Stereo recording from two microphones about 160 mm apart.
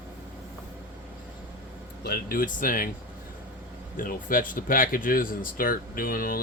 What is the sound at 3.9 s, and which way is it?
Speech, 60° left (ahead or behind).